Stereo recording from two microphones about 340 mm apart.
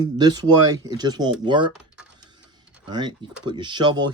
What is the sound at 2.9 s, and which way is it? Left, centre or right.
Speech, centre.